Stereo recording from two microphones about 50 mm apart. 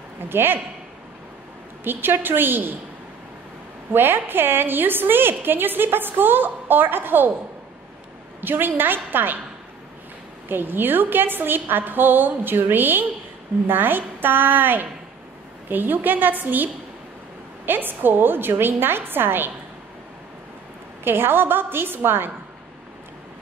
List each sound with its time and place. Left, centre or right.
0.3 s a woman's voice: right
1.9 s a woman's voice: right
3.9 s a woman's voice: right
8.4 s a woman's voice: right
10.5 s a woman's voice: right
21.0 s a woman's voice: right